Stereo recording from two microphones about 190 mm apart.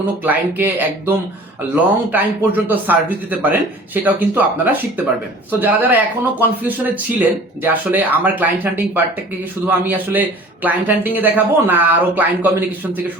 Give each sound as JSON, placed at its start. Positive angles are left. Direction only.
{"t": 0.2, "sound": "speech", "side_deg": -10}